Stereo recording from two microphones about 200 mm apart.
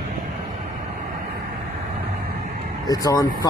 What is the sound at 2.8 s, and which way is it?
Speech, 20° left (ahead or behind).